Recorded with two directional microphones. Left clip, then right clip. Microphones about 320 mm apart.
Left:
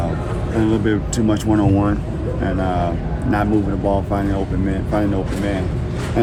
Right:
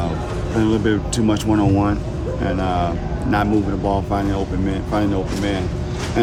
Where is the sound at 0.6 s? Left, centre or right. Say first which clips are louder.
Even; centre.